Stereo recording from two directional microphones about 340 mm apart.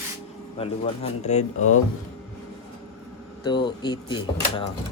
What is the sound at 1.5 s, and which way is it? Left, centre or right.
Speech, left.